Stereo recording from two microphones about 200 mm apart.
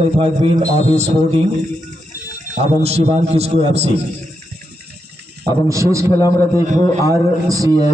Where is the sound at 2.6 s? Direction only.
30° right (ahead or behind).